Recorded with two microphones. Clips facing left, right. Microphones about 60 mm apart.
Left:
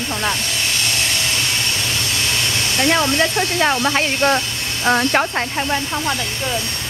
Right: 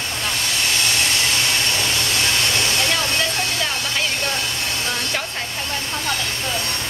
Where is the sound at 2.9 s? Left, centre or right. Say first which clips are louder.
Left 5 dB; left.